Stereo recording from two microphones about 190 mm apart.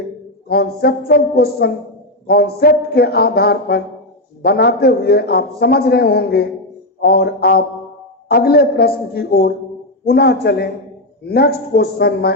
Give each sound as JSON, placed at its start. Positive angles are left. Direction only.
{"t": 0.4, "sound": "a man's voice", "side_deg": 55}